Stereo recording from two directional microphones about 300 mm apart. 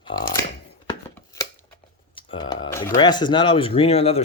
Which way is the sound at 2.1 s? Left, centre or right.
Centre.